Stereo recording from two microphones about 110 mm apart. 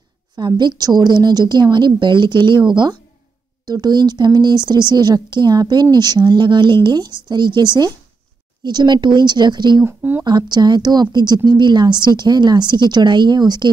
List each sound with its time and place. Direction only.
0.4 s speech: 40° right (ahead or behind)
9.8 s speech: 20° right (ahead or behind)
10.2 s speech: 40° right (ahead or behind)